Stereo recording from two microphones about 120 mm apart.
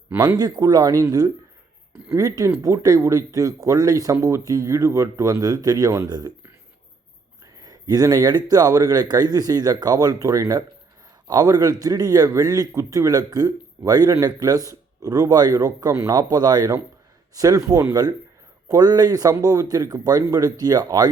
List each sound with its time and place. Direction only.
0.3 s a man's voice: 35° right (ahead or behind)
7.5 s a man's voice: 30° right (ahead or behind)